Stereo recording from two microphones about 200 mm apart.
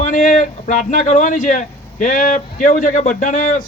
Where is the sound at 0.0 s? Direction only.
40° left (ahead or behind).